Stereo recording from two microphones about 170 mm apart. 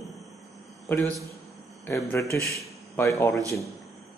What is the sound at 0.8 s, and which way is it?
A man's voice, 10° left (ahead or behind).